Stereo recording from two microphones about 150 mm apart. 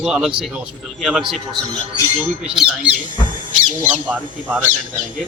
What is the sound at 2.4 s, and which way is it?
Speech, 5° right (ahead or behind).